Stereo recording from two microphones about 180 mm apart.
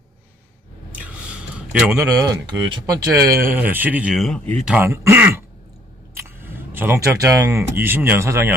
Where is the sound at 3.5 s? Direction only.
10° right (ahead or behind).